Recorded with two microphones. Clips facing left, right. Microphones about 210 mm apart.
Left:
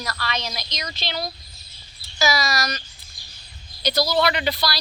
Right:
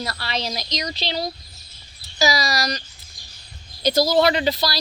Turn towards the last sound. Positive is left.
turn(degrees=-30)  # may be behind; listen again after turning